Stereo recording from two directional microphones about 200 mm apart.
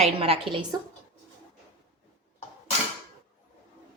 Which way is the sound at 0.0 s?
30° right (ahead or behind).